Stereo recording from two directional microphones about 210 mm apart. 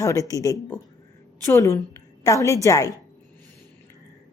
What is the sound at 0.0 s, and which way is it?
Speech, 15° left (ahead or behind).